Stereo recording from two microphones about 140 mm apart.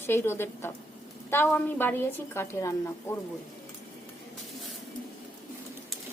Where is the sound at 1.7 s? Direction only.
15° left (ahead or behind).